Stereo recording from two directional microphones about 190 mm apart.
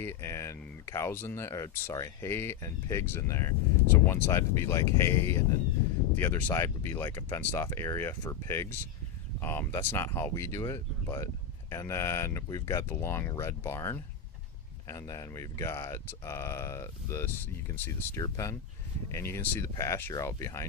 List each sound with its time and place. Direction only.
0.0 s speech: 15° left (ahead or behind)